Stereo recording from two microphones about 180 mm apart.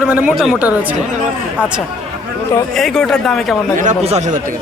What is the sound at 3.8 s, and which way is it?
Speech, 40° right (ahead or behind).